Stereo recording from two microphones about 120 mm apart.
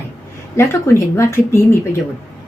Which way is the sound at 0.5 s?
25° left (ahead or behind).